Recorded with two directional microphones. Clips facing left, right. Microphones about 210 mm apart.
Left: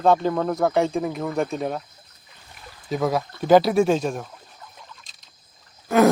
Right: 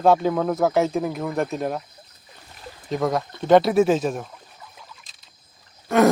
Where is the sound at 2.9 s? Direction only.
5° left (ahead or behind).